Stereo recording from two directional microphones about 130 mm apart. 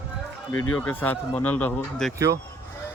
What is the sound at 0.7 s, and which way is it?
Speech, 15° left (ahead or behind).